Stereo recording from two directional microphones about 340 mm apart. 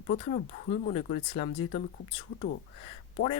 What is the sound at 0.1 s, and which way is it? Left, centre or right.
Speech, left.